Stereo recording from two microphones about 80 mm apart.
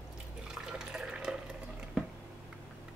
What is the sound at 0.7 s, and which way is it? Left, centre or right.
Water, centre.